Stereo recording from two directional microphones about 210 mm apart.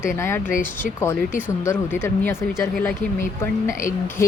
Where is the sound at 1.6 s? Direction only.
10° left (ahead or behind).